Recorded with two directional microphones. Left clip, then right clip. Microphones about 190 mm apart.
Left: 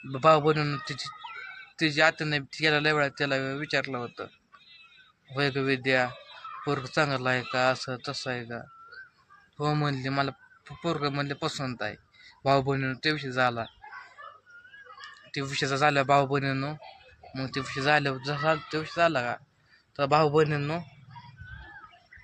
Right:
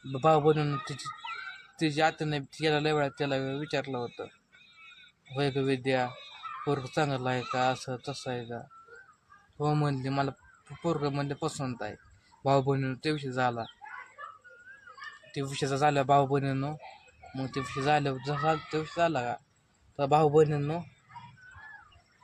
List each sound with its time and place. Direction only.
0.1 s speech: 5° left (ahead or behind)
5.3 s speech: 5° left (ahead or behind)
14.2 s dog: 45° left (ahead or behind)
15.3 s speech: 5° left (ahead or behind)